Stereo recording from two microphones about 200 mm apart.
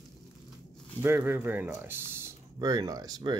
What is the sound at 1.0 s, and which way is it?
Speech, 10° right (ahead or behind).